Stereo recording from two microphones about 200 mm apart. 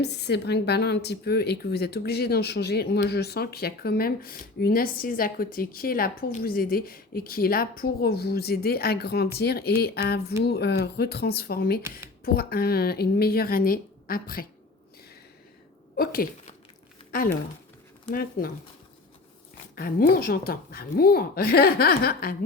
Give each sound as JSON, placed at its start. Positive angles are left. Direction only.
{"t": 0.0, "sound": "a woman's voice", "side_deg": 55}
{"t": 16.0, "sound": "a sound", "side_deg": 45}
{"t": 18.1, "sound": "speech", "side_deg": 45}
{"t": 19.7, "sound": "speech", "side_deg": 45}